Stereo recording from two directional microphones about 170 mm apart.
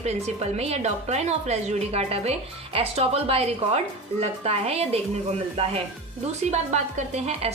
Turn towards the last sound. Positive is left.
turn(degrees=-40)  # may be behind; listen again after turning